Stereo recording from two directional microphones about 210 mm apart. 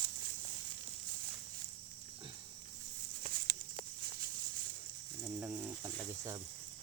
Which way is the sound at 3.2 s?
45° right (ahead or behind).